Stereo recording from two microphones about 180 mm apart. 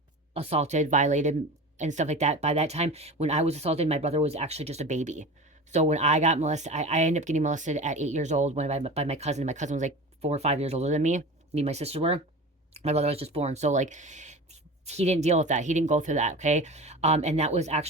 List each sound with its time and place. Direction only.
0.3 s speech: 35° right (ahead or behind)